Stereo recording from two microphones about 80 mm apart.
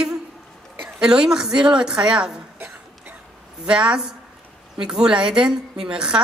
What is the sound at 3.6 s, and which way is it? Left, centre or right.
Speech, centre.